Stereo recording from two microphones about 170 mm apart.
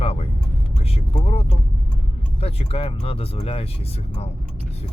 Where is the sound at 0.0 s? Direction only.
35° left (ahead or behind).